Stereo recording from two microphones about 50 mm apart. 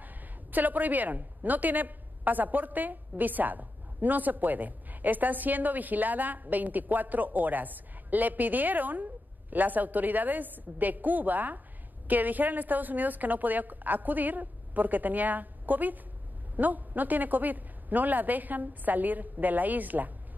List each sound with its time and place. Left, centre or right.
0.0 s a woman's voice: right